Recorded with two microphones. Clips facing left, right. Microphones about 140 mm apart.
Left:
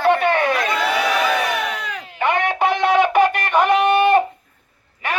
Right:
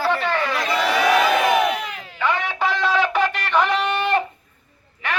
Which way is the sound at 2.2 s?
55° left (ahead or behind).